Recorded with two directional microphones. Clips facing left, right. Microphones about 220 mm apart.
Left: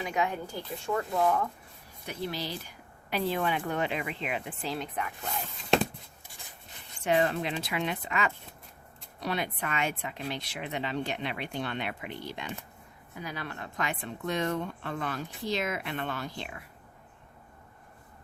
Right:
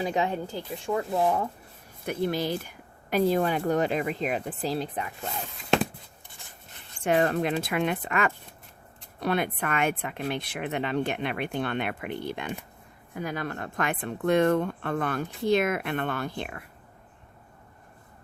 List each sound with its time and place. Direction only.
0.0 s speech: 30° right (ahead or behind)
0.5 s speech: 15° right (ahead or behind)
2.0 s speech: 50° right (ahead or behind); by 5.3 s 30° right (ahead or behind)
7.0 s speech: 50° right (ahead or behind)